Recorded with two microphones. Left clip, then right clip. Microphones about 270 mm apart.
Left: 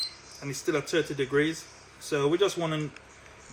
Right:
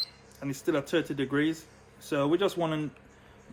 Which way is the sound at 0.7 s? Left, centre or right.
Right.